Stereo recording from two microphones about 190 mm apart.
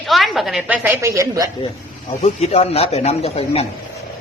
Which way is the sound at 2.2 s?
30° left (ahead or behind).